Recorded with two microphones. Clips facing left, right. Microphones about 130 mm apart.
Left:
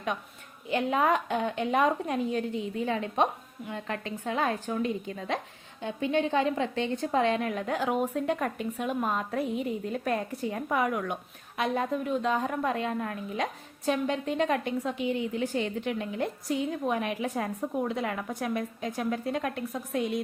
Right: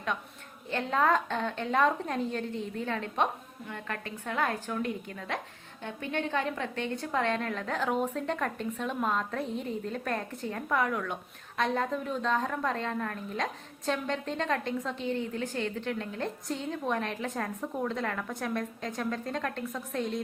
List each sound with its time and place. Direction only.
0.7 s a woman's voice: 15° left (ahead or behind)